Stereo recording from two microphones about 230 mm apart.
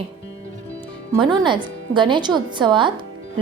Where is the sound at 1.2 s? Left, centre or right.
Centre.